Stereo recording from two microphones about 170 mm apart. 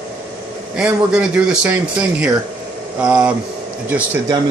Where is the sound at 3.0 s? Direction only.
5° right (ahead or behind).